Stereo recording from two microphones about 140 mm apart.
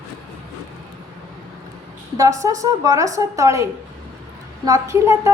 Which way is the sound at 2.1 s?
25° right (ahead or behind).